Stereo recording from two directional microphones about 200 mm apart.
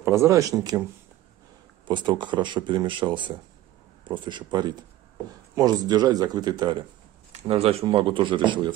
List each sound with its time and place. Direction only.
0.0 s speech: 15° right (ahead or behind)
1.9 s speech: 25° right (ahead or behind)